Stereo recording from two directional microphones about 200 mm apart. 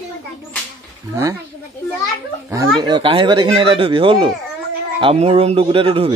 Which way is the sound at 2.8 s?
25° right (ahead or behind).